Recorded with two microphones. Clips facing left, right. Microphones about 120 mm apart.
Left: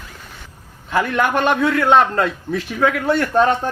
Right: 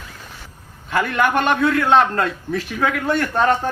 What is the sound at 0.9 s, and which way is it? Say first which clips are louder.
Speech: left 1 dB; 20° left (ahead or behind).